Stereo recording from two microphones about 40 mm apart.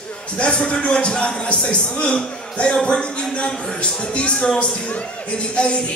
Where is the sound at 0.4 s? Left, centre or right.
Left.